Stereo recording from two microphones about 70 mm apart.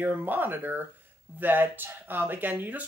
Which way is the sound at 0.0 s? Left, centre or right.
Right.